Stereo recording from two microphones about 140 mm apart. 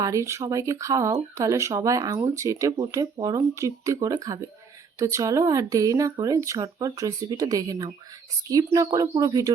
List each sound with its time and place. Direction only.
0.0 s speech: 20° right (ahead or behind)